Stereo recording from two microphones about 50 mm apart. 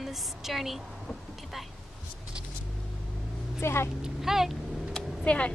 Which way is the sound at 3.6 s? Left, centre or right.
Left.